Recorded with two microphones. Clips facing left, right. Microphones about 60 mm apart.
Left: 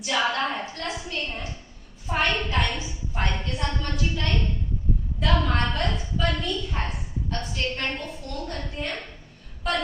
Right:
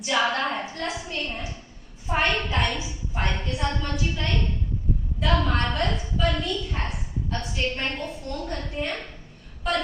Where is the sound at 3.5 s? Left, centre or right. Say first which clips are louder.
Right 2 dB; centre.